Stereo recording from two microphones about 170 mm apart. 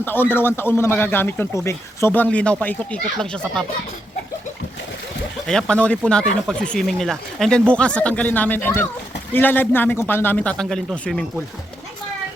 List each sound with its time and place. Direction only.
0.0 s a man's voice: 10° left (ahead or behind)
5.5 s a man's voice: 5° left (ahead or behind)